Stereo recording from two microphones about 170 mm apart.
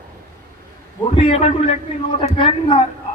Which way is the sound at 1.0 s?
35° left (ahead or behind).